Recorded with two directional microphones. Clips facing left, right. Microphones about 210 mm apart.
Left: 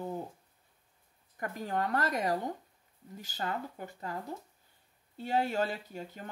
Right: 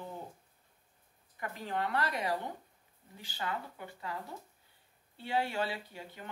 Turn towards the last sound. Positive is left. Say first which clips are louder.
# left 4 dB
turn(degrees=45)  # may be behind; listen again after turning